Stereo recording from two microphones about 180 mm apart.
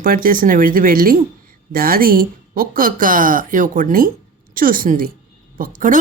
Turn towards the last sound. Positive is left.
turn(degrees=-45)  # may be behind; listen again after turning